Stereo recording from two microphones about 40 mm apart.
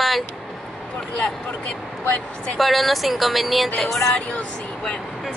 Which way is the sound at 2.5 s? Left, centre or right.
Centre.